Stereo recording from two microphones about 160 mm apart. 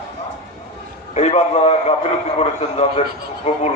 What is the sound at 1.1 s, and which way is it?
A man's voice, 45° left (ahead or behind).